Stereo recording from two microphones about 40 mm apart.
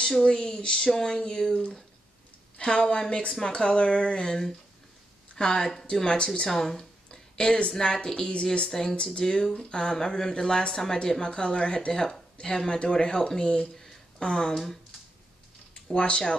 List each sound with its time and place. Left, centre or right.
0.2 s a woman's voice: centre
6.0 s a woman's voice: left
6.5 s speech: centre
7.1 s a sound: left
7.7 s a woman's voice: centre
8.6 s speech: centre
8.9 s a woman's voice: left
9.2 s a woman's voice: centre
15.7 s speech: left